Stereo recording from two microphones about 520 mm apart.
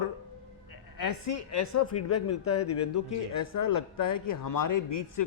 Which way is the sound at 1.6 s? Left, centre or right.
Left.